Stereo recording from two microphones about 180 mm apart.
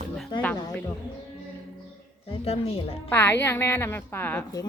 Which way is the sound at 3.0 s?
10° left (ahead or behind).